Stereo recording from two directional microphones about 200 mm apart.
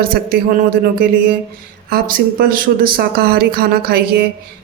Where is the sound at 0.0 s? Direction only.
45° right (ahead or behind).